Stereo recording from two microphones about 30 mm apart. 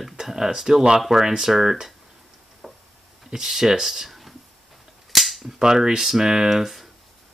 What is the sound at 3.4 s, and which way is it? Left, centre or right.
Speech, centre.